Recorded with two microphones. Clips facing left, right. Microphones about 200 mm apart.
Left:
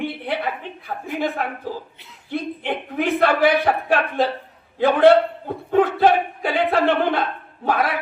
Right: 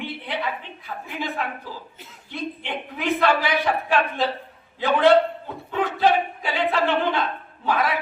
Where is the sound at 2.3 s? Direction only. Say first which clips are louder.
Left 5 dB; 55° left (ahead or behind).